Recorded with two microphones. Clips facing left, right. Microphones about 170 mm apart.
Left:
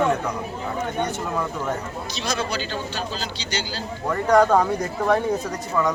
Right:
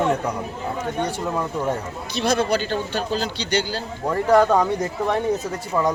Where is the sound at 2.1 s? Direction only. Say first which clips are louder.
Right 7 dB; 55° right (ahead or behind).